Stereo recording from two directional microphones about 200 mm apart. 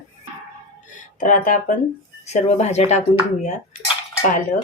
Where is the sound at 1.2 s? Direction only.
40° left (ahead or behind).